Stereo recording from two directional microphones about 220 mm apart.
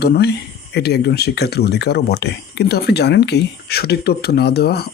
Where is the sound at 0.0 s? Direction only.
45° left (ahead or behind).